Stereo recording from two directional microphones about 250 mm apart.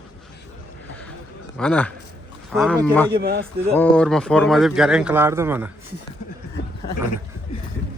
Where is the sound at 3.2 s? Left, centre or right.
Right.